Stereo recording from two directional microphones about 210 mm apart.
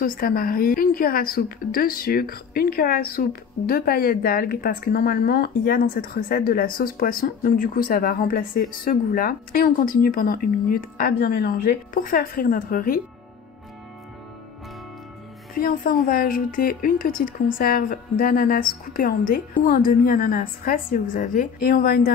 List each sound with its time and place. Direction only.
0.0 s a woman's voice: 45° left (ahead or behind)
15.5 s a woman's voice: 45° left (ahead or behind)